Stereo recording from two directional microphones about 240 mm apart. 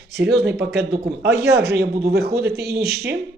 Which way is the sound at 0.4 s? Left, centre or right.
Right.